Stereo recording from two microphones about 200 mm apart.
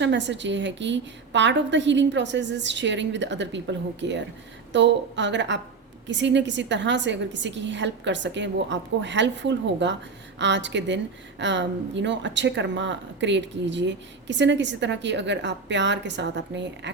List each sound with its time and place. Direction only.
0.0 s speech: 60° right (ahead or behind)